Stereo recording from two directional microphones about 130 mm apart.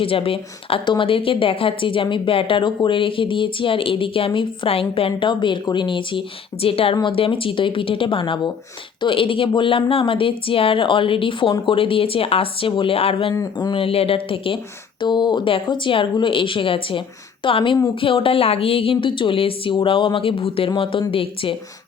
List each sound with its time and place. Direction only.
0.0 s a woman's voice: 45° left (ahead or behind)
13.3 s a woman's voice: 30° left (ahead or behind)